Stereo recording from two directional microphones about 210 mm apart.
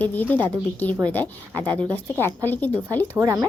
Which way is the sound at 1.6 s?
20° right (ahead or behind).